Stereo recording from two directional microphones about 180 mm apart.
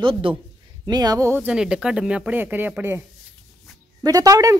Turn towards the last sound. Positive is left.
turn(degrees=-20)  # may be behind; listen again after turning